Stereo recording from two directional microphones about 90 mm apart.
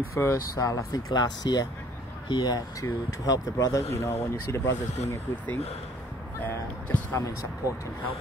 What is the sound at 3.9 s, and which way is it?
Speech, 30° left (ahead or behind).